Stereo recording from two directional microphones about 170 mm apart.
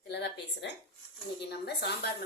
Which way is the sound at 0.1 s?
80° left.